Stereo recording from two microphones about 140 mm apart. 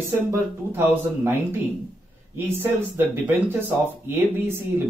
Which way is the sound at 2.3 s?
15° right (ahead or behind).